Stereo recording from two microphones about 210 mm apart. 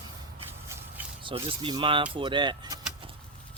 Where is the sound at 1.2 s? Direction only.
25° right (ahead or behind).